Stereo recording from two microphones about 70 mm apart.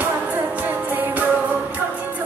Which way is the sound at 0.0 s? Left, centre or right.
Right.